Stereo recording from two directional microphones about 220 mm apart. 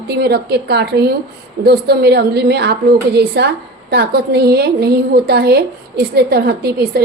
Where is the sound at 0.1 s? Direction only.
45° right (ahead or behind).